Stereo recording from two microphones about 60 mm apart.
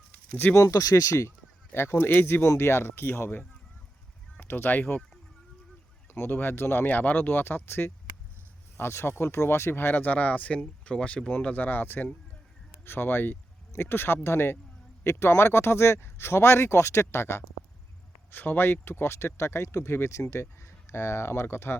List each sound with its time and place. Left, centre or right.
0.1 s a sound: left
0.5 s speech: left
1.7 s speech: left
6.1 s speech: left
18.3 s speech: left